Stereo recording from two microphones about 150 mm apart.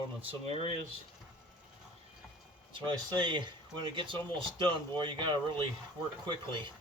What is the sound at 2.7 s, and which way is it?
Speech, 30° right (ahead or behind).